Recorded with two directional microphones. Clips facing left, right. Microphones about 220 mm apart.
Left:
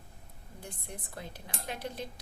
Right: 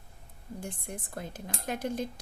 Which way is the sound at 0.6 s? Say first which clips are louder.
Right 4 dB; 50° right (ahead or behind).